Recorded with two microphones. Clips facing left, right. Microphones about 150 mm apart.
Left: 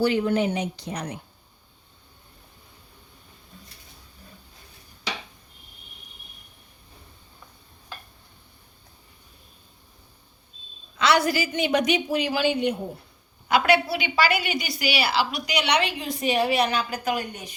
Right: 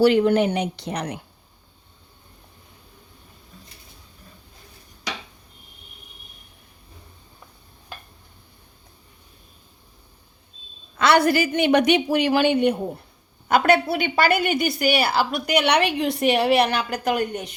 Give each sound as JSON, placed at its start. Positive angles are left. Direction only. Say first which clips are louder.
{"t": 0.0, "sound": "a woman's voice", "louder": "right 5 dB", "side_deg": -70}
{"t": 10.9, "sound": "a woman's voice", "louder": "right 4 dB", "side_deg": -55}